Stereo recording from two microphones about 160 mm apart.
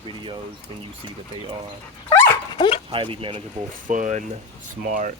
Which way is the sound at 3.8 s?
55° right (ahead or behind).